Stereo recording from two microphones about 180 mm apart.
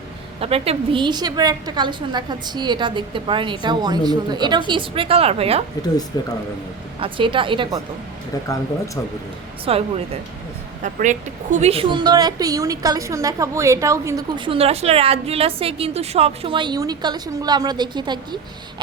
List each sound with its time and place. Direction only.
0.3 s a woman's voice: 35° right (ahead or behind)
6.1 s a man's voice: 20° left (ahead or behind)
7.0 s a woman's voice: 30° right (ahead or behind)
9.7 s speech: 30° right (ahead or behind)
10.8 s a woman's voice: 45° right (ahead or behind); by 14.3 s 15° right (ahead or behind)
14.3 s a woman's voice: 30° right (ahead or behind)